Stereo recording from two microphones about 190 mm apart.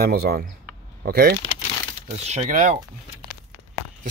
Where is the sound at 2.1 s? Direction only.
35° right (ahead or behind).